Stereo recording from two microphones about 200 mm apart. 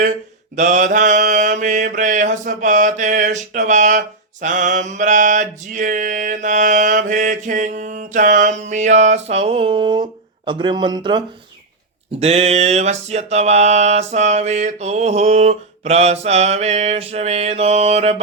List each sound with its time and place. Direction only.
0.5 s mantra: 40° right (ahead or behind)